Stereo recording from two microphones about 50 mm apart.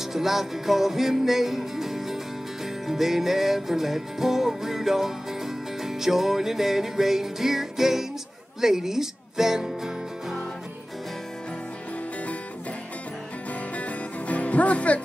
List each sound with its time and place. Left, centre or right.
0.0 s music: centre
8.5 s speech: centre
13.5 s music: left